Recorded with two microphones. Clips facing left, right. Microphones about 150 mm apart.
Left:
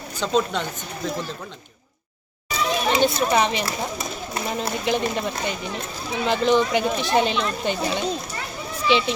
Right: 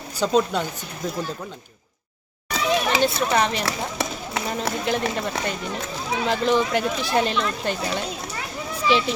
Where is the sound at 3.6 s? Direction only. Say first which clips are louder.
Right 1 dB; 85° right.